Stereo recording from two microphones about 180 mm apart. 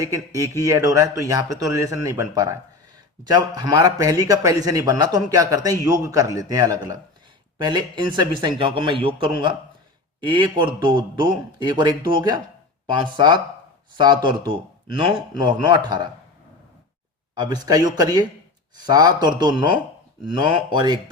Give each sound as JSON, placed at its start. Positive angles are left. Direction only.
{"t": 0.3, "sound": "speech", "side_deg": -20}
{"t": 17.3, "sound": "speech", "side_deg": -20}